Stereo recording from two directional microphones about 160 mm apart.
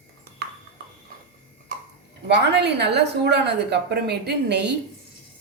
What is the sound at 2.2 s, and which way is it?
A woman's voice, 90° right.